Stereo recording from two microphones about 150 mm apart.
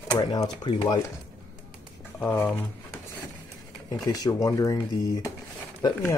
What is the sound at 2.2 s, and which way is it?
Speech, 15° left (ahead or behind).